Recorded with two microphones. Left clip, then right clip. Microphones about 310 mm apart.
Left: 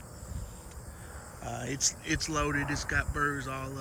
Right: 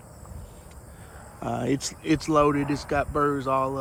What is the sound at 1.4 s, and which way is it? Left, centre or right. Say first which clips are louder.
Speech: right 6 dB; centre.